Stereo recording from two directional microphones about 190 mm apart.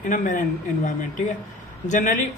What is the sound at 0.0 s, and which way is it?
Speech, 45° left (ahead or behind).